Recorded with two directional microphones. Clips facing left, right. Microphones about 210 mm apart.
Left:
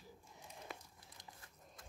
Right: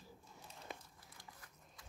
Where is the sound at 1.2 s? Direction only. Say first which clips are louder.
Even; 20° left (ahead or behind).